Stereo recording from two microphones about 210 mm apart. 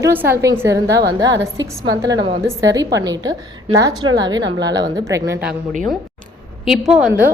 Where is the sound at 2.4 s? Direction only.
15° right (ahead or behind).